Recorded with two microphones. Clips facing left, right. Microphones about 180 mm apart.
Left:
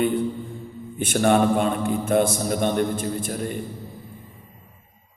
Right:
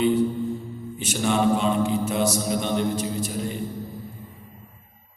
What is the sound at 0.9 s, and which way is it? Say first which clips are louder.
A man's voice: left 5 dB; 55° left (ahead or behind).